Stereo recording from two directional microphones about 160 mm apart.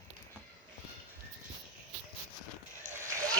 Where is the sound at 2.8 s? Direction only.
55° right (ahead or behind).